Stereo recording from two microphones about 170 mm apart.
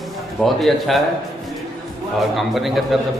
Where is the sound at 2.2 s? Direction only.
Centre (ahead or behind).